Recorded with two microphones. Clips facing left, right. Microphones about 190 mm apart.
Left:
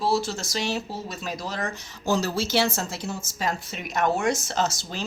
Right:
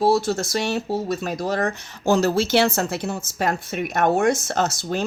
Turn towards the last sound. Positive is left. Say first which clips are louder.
# right 4 dB
turn(degrees=-55)  # may be behind; listen again after turning